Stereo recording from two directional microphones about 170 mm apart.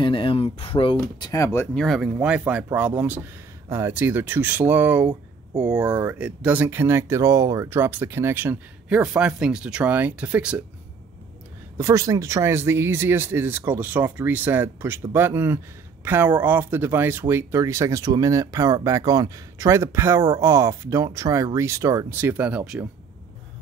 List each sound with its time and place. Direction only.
0.0 s speech: 30° left (ahead or behind)
0.9 s speech: 20° left (ahead or behind); by 10.6 s 5° right (ahead or behind)
11.8 s speech: 20° right (ahead or behind)